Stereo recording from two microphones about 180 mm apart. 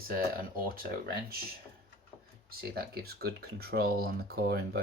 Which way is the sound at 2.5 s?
60° right (ahead or behind).